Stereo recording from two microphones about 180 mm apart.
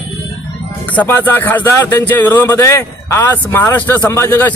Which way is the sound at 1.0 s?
10° left (ahead or behind).